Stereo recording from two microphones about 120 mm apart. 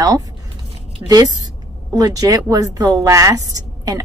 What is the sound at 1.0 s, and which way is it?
A woman's voice, 35° right (ahead or behind).